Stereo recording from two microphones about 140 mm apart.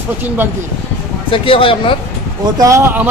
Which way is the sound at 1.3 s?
40° left (ahead or behind).